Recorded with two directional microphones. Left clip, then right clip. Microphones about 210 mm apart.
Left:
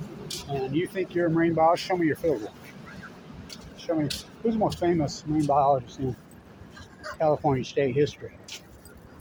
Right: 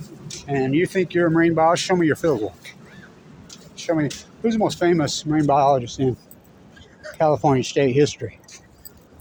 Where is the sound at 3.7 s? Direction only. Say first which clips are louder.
Right 6 dB; 50° right (ahead or behind).